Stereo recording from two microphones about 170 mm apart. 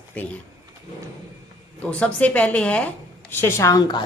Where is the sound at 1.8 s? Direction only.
5° left (ahead or behind).